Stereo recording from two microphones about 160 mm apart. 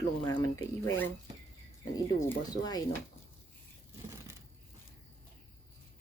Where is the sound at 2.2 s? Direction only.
20° left (ahead or behind).